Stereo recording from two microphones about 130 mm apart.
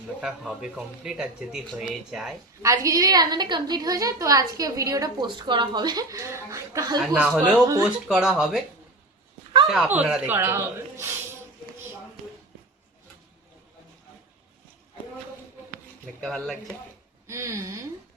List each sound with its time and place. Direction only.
0.2 s speech: 5° right (ahead or behind)
2.6 s a woman's voice: 25° right (ahead or behind)
7.2 s speech: 10° right (ahead or behind)
9.6 s speech: centre (ahead or behind); by 11.1 s 20° right (ahead or behind)
16.2 s speech: 5° left (ahead or behind)
17.2 s speech: 20° right (ahead or behind)